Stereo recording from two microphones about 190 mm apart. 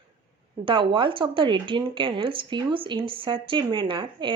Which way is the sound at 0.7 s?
25° right (ahead or behind).